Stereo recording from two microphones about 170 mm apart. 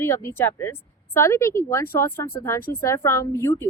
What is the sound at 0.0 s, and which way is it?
A woman's voice, 15° left (ahead or behind).